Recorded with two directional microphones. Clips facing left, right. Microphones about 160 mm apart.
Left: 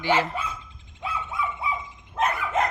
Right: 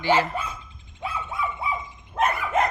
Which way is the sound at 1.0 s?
60° right (ahead or behind).